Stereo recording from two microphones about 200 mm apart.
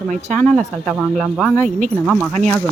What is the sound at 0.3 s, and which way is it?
Speech, 5° left (ahead or behind).